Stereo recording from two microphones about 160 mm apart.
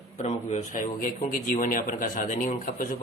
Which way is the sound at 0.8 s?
60° left (ahead or behind).